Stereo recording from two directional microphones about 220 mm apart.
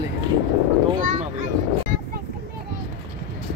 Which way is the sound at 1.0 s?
35° right (ahead or behind).